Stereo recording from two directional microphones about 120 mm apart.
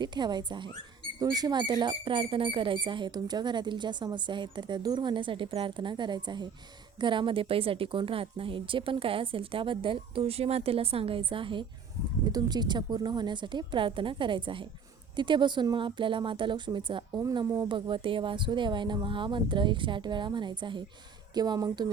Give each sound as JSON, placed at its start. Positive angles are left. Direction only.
{"t": 0.0, "sound": "speech", "side_deg": -40}
{"t": 12.2, "sound": "speech", "side_deg": -35}